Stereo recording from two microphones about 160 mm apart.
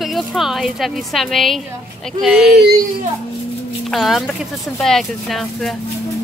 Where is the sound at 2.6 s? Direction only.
75° right (ahead or behind).